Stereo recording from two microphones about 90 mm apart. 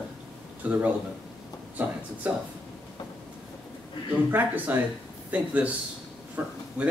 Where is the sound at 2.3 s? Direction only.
20° right (ahead or behind).